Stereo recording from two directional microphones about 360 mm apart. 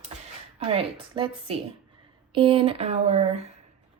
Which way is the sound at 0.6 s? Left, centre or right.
Centre.